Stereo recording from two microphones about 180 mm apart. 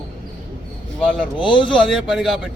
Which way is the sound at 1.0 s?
Centre (ahead or behind).